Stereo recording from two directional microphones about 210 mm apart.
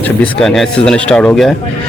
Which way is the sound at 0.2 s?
Centre (ahead or behind).